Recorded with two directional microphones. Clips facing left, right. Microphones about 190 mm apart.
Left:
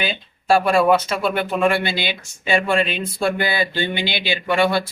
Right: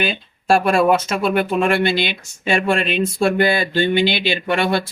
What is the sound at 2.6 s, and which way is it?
Speech, 50° right (ahead or behind).